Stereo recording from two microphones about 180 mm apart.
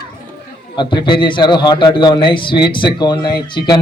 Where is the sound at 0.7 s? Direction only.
25° left (ahead or behind).